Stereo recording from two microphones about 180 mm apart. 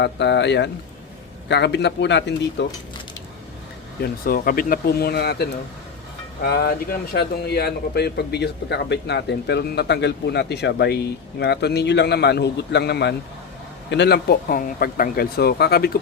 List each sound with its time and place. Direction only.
0.0 s speech: 75° left (ahead or behind)
4.0 s speech: 55° left (ahead or behind)